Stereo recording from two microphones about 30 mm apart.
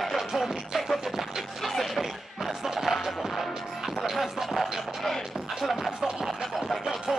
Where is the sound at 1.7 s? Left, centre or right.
Centre.